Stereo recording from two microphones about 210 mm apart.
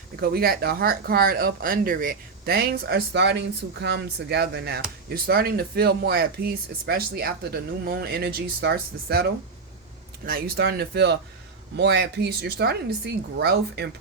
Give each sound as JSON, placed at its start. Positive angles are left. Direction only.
{"t": 0.2, "sound": "speech", "side_deg": -45}
{"t": 10.2, "sound": "speech", "side_deg": -45}